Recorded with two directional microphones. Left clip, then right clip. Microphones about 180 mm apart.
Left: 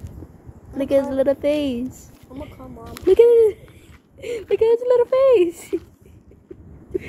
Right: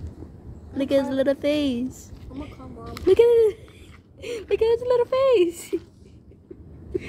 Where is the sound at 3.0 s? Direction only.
25° right (ahead or behind).